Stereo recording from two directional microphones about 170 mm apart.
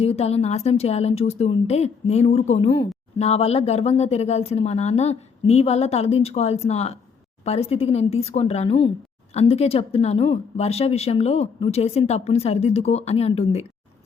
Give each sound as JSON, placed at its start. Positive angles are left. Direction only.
{"t": 0.0, "sound": "speech", "side_deg": 40}